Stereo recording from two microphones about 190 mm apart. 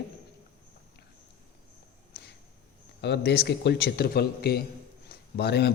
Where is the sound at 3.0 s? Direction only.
60° left (ahead or behind).